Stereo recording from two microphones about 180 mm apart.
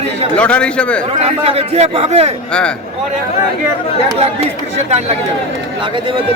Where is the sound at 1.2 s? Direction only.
35° right (ahead or behind).